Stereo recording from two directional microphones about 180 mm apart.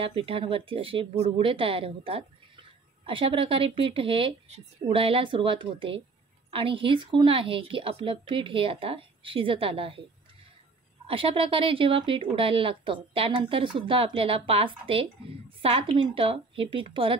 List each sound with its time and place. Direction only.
0.0 s a woman's voice: 30° right (ahead or behind)
11.1 s a woman's voice: 30° right (ahead or behind)